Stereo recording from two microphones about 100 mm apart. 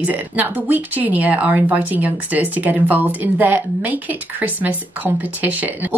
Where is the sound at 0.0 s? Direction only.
20° right (ahead or behind).